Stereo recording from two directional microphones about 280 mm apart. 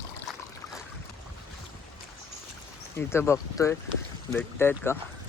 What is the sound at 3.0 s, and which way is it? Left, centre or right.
Speech, centre.